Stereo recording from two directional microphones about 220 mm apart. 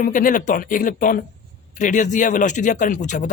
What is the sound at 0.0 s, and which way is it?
A man's voice, 40° left (ahead or behind).